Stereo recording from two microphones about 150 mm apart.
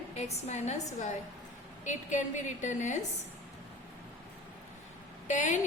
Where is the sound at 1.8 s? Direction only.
55° left (ahead or behind).